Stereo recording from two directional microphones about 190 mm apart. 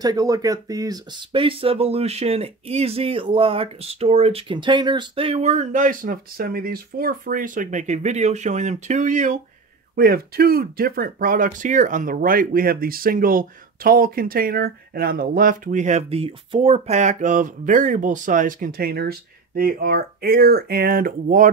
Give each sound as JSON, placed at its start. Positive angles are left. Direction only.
{"t": 0.0, "sound": "speech", "side_deg": -20}
{"t": 9.9, "sound": "speech", "side_deg": -55}